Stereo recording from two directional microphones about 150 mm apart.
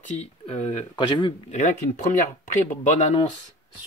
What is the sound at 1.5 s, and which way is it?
Speech, 55° left (ahead or behind).